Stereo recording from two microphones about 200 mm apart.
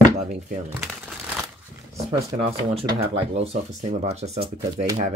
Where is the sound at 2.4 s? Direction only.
30° right (ahead or behind).